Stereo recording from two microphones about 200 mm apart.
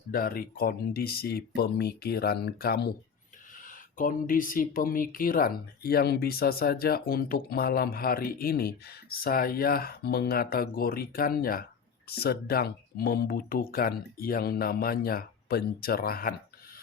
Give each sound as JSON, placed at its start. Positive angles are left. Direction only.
{"t": 0.1, "sound": "speech", "side_deg": 45}